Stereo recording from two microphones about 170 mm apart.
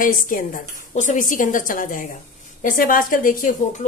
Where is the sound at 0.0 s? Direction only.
55° left (ahead or behind).